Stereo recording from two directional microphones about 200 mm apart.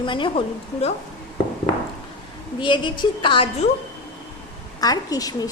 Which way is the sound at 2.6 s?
25° left (ahead or behind).